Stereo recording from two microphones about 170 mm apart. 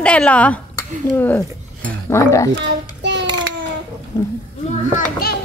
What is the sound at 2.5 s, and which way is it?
Child singing, 90° right.